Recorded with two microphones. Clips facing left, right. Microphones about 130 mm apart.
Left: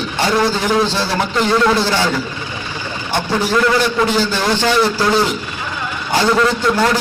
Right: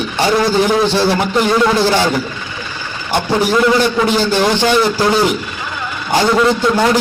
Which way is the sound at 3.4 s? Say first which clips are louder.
Right 3 dB; 15° right (ahead or behind).